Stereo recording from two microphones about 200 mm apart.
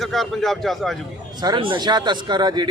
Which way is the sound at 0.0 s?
Centre (ahead or behind).